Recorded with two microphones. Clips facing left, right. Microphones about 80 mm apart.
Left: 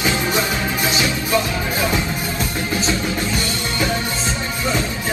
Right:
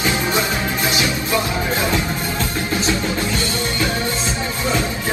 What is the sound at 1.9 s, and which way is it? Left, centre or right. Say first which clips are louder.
Music: right 1 dB; centre.